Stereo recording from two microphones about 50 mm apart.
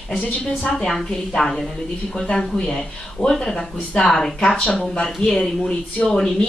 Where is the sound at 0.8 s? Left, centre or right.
Centre.